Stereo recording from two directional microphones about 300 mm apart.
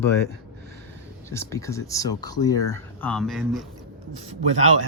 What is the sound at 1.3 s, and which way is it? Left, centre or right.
Speech, centre.